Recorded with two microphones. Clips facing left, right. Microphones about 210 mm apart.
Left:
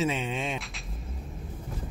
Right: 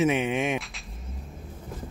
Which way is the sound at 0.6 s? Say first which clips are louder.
Left 2 dB; centre (ahead or behind).